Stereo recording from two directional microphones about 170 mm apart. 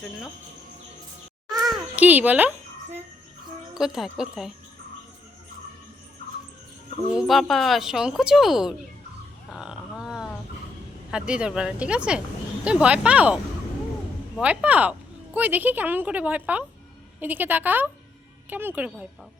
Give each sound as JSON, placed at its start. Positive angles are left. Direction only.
{"t": 1.6, "sound": "a child's voice", "side_deg": -5}
{"t": 3.8, "sound": "speech", "side_deg": 0}
{"t": 7.1, "sound": "speech", "side_deg": 0}
{"t": 9.5, "sound": "a sound", "side_deg": 0}
{"t": 11.1, "sound": "speech", "side_deg": -5}
{"t": 14.4, "sound": "speech", "side_deg": -10}